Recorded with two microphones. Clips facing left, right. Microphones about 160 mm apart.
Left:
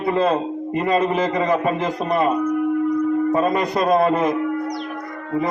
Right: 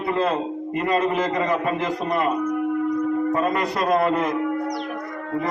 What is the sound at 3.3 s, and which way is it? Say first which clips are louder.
A man's voice: left 3 dB; 20° left (ahead or behind).